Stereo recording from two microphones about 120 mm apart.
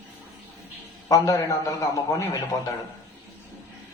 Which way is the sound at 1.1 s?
25° left (ahead or behind).